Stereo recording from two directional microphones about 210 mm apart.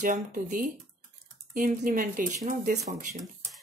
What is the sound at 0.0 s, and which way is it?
Speech, 40° right (ahead or behind).